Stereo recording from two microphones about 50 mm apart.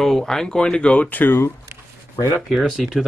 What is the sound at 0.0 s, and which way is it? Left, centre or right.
Speech, centre.